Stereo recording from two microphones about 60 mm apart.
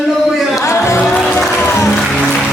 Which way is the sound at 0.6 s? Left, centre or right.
Left.